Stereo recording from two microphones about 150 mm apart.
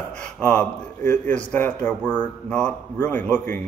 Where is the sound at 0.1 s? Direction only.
10° left (ahead or behind).